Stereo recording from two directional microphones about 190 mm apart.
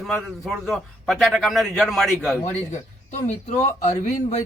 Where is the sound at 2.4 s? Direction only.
40° left (ahead or behind).